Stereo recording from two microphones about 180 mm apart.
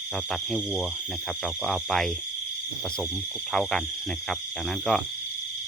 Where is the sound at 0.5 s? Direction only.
Centre (ahead or behind).